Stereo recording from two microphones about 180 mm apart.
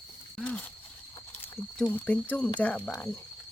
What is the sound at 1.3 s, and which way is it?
Speech, 10° left (ahead or behind).